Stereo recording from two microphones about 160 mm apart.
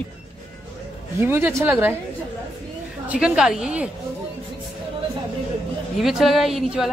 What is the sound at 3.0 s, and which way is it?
Speech, 5° right (ahead or behind).